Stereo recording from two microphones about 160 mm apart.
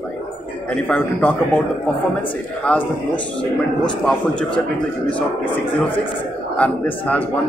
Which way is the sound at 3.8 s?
5° left (ahead or behind).